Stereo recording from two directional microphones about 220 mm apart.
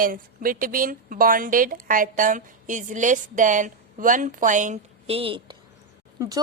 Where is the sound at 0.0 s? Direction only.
40° right (ahead or behind).